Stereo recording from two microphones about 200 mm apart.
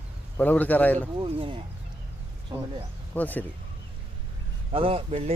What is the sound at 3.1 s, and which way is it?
Speech, 10° left (ahead or behind).